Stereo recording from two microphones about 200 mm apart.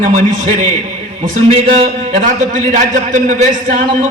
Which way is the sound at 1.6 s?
35° right (ahead or behind).